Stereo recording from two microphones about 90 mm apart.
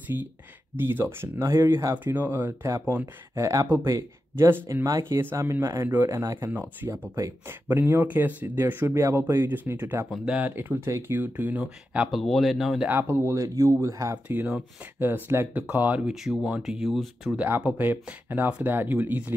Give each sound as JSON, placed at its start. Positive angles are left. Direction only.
{"t": 0.7, "sound": "speech", "side_deg": -25}
{"t": 3.3, "sound": "speech", "side_deg": -35}
{"t": 4.8, "sound": "speech", "side_deg": -40}
{"t": 5.2, "sound": "speech", "side_deg": -30}
{"t": 6.5, "sound": "speech", "side_deg": -20}
{"t": 7.2, "sound": "speech", "side_deg": -40}
{"t": 7.6, "sound": "speech", "side_deg": -20}
{"t": 12.1, "sound": "speech", "side_deg": 0}
{"t": 12.8, "sound": "speech", "side_deg": -25}
{"t": 14.2, "sound": "speech", "side_deg": -20}
{"t": 16.1, "sound": "speech", "side_deg": -10}
{"t": 17.4, "sound": "speech", "side_deg": -15}